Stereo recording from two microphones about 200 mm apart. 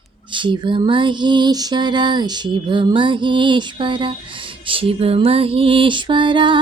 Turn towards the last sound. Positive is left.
turn(degrees=-25)  # may be behind; listen again after turning